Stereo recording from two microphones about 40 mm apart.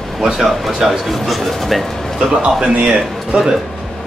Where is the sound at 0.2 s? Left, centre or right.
Centre.